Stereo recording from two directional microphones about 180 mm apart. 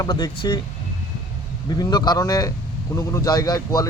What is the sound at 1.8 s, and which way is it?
Speech, 25° left (ahead or behind).